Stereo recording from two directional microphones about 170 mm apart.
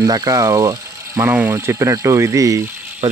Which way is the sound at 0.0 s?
20° right (ahead or behind).